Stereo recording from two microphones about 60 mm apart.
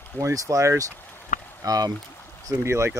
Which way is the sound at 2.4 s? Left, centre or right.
Right.